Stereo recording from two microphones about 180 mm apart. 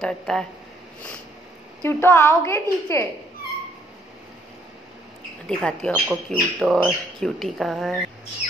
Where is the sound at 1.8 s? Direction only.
15° left (ahead or behind).